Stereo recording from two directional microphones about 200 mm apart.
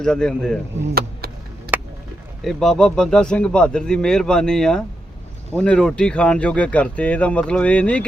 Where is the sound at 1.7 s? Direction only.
10° right (ahead or behind).